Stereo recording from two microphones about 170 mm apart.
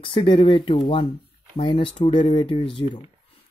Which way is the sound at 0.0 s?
30° left (ahead or behind).